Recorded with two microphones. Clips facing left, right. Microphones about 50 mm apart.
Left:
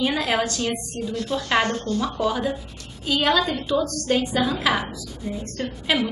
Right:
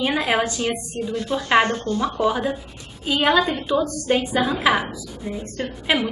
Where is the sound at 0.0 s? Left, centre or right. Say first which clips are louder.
Right 2 dB; centre.